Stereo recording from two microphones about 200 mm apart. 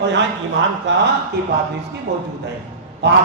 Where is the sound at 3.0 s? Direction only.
55° right (ahead or behind).